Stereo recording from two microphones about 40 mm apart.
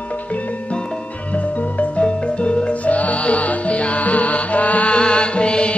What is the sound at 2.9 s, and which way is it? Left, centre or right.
Music, left.